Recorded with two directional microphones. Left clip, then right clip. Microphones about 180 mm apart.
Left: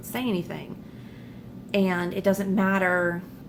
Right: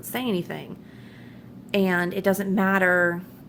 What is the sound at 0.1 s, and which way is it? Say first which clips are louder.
Speech: right 2 dB; 40° right (ahead or behind).